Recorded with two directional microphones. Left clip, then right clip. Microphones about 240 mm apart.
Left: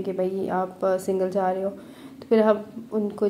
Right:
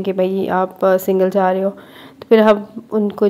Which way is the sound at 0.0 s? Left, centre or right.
Right.